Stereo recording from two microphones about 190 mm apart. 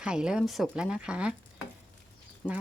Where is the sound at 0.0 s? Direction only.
5° right (ahead or behind).